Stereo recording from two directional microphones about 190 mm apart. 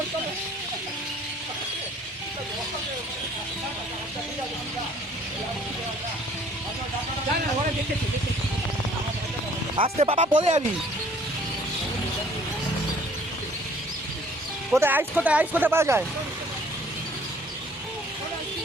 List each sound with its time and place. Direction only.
9.7 s speech: 30° right (ahead or behind)
14.7 s speech: 10° right (ahead or behind)